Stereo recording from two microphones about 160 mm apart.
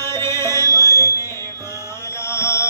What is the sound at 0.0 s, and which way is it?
Music, 15° left (ahead or behind).